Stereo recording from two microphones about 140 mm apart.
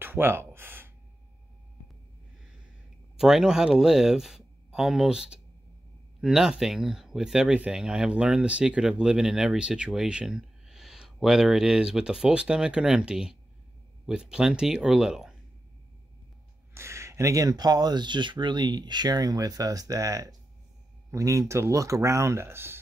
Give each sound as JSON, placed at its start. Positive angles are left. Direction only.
{"t": 0.0, "sound": "a sound", "side_deg": -15}
{"t": 3.2, "sound": "speech", "side_deg": -5}
{"t": 16.7, "sound": "speech", "side_deg": -20}